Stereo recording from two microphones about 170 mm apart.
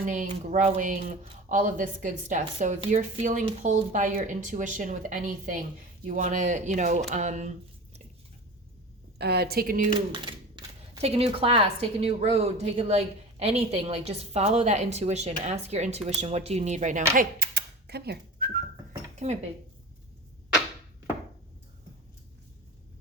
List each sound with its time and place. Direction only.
0.0 s speech: 50° right (ahead or behind)
9.1 s a woman's voice: 70° right (ahead or behind)
10.1 s speech: 25° right (ahead or behind); by 17.0 s 45° right (ahead or behind)
17.2 s whistling: 65° right (ahead or behind)
19.2 s speech: 45° right (ahead or behind)